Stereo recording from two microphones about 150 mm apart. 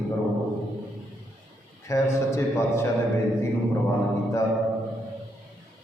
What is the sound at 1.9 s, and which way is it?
A man's voice, 20° left (ahead or behind).